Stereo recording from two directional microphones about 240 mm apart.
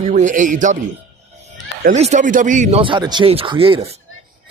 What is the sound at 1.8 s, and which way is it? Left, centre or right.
Speech, right.